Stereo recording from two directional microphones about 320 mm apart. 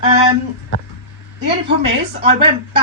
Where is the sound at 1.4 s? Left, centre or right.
Centre.